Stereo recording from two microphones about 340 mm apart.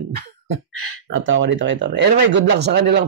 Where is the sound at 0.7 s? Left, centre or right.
Right.